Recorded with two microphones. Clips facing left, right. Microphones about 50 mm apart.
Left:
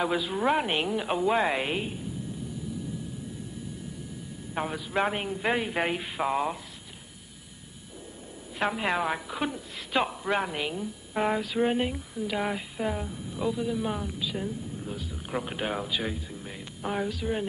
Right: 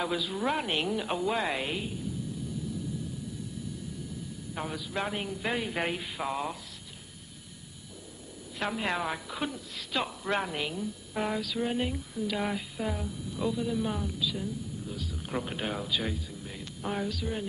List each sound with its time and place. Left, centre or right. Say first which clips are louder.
0.0 s speech: left 4 dB; left
4.6 s speech: left 6 dB; left
8.5 s a woman's voice: left 4 dB; centre
10.2 s speech: left 2 dB; centre; by 11.8 s left
11.8 s a woman's voice: left 2 dB; centre
13.4 s a woman's voice: left 1 dB; centre